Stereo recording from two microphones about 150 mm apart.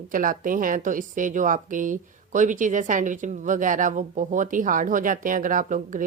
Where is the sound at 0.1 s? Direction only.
65° right (ahead or behind).